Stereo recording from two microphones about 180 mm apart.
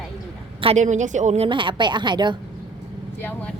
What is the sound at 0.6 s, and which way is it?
A woman's voice, 35° right (ahead or behind).